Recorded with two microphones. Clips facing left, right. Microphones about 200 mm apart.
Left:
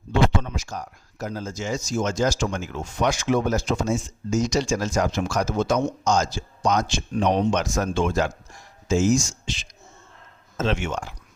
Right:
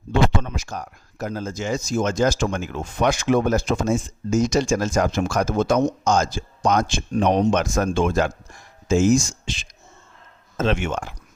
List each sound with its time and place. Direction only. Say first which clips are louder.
0.1 s speech: right 1 dB; 55° right (ahead or behind)